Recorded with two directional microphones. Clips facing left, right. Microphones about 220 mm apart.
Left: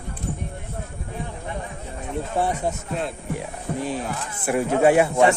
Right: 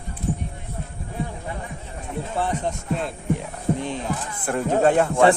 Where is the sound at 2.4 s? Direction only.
10° left (ahead or behind).